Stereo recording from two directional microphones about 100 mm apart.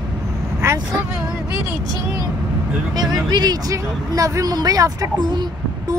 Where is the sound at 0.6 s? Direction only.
30° right (ahead or behind).